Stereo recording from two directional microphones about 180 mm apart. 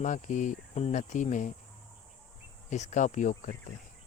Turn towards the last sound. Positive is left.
turn(degrees=45)  # may be behind; listen again after turning